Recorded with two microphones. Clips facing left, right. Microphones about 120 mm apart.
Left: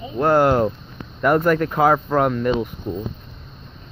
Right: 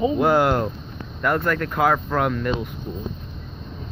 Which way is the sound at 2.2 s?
5° left (ahead or behind).